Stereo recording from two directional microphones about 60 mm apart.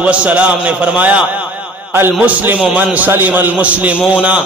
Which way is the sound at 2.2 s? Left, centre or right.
Right.